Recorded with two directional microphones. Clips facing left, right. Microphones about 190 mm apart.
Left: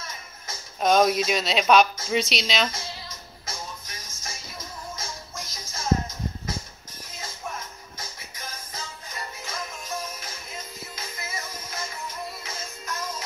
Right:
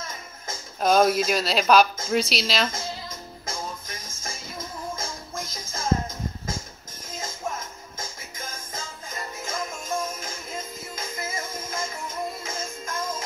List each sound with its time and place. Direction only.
0.7 s speech: centre (ahead or behind)
2.7 s music: 50° right (ahead or behind)
7.2 s music: 45° right (ahead or behind)